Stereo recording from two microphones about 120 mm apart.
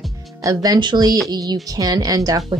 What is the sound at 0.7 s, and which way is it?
A woman's voice, 40° right (ahead or behind).